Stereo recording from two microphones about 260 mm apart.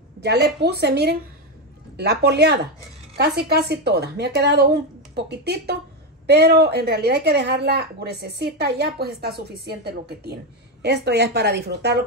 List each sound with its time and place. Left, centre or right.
0.2 s a woman's voice: right